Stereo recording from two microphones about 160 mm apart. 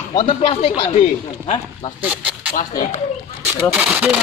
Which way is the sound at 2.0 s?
10° right (ahead or behind).